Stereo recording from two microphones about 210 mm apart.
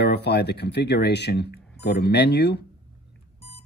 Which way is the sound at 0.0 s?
50° left (ahead or behind).